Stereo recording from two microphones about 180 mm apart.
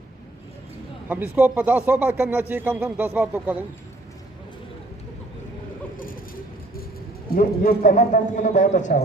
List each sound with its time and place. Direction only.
1.0 s speech: 10° right (ahead or behind)
7.3 s a man's voice: 55° left (ahead or behind)